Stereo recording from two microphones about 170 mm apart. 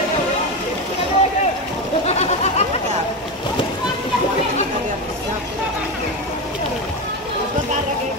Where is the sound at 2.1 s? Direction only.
40° left (ahead or behind).